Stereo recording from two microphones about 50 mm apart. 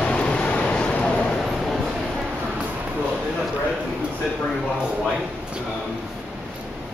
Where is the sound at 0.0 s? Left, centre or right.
Left.